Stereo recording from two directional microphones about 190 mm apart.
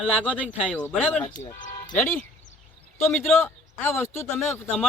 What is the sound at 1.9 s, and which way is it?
Speech, 5° left (ahead or behind).